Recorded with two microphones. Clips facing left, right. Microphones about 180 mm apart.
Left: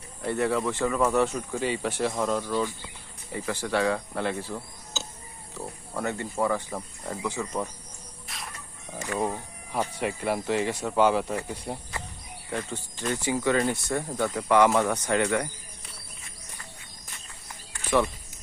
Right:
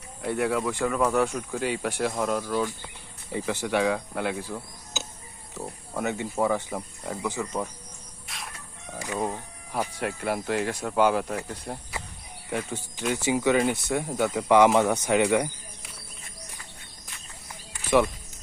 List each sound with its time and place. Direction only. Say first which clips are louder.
0.2 s speech: even; 5° right (ahead or behind)
3.3 s speech: right 2 dB; 20° right (ahead or behind); by 6.1 s 5° right (ahead or behind)
6.1 s speech: right 1 dB; 15° right (ahead or behind)
8.3 s music: right 1 dB; centre (ahead or behind)
9.1 s speech: left 1 dB; centre (ahead or behind)
12.5 s speech: right 2 dB; 10° right (ahead or behind)
13.6 s speech: right 2 dB; 5° right (ahead or behind)